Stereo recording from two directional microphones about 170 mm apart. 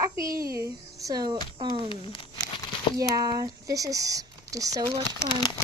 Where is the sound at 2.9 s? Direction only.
20° right (ahead or behind).